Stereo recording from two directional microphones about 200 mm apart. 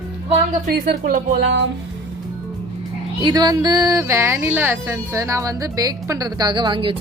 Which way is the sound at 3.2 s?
20° right (ahead or behind).